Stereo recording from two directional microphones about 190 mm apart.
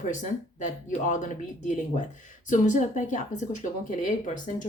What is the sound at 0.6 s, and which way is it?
Speech, 40° left (ahead or behind).